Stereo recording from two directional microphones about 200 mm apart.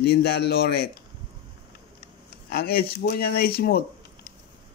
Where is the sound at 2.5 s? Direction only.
50° left (ahead or behind).